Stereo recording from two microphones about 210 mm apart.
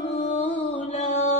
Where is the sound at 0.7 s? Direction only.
30° left (ahead or behind).